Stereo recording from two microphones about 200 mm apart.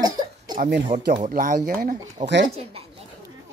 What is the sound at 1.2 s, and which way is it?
Speech, 40° right (ahead or behind).